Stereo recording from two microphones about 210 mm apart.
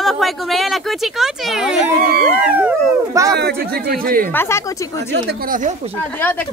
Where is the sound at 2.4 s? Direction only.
10° right (ahead or behind).